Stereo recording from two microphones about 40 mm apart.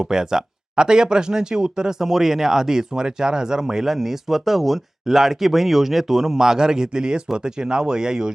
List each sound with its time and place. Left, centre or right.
0.0 s speech: centre
2.0 s speech: centre